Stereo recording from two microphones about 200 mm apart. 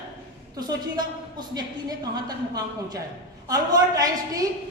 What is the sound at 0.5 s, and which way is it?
A woman's voice, 20° right (ahead or behind).